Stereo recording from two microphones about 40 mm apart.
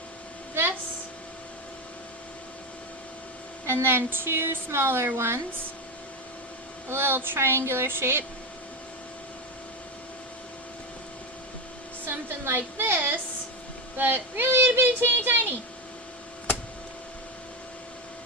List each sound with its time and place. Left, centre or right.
3.7 s a woman's voice: right
6.9 s speech: right
12.0 s a sound: right
13.9 s speech: right